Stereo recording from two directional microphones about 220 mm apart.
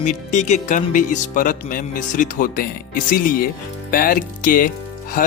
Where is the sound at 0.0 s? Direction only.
35° left (ahead or behind).